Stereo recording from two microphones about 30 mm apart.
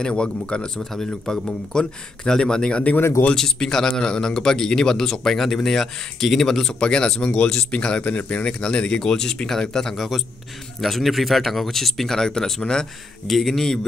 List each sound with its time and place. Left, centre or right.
0.1 s speech: left
0.7 s speech: centre
3.3 s speech: centre
3.8 s speech: left; by 6.6 s centre
6.6 s speech: left
7.2 s speech: left
7.5 s speech: left
8.5 s speech: left
9.9 s speech: centre
12.2 s speech: centre
13.3 s speech: centre